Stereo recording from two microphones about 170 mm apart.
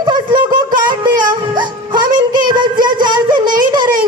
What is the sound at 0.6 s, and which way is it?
Music, 25° right (ahead or behind).